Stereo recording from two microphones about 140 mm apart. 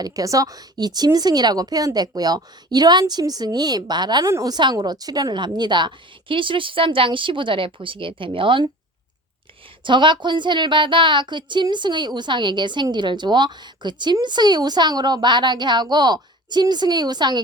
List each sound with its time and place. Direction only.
0.0 s a woman's voice: 25° right (ahead or behind)
9.8 s a woman's voice: 35° right (ahead or behind)